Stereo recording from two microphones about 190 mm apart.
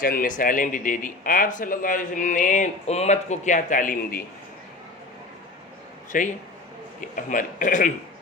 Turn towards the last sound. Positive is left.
turn(degrees=45)  # may be behind; listen again after turning